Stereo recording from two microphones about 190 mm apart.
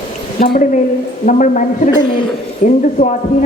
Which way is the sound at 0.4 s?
50° left (ahead or behind).